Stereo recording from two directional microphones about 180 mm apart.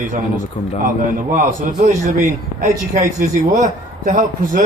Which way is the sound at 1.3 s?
45° right (ahead or behind).